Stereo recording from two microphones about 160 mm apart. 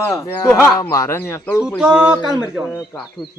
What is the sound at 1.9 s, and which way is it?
Speech, 10° right (ahead or behind).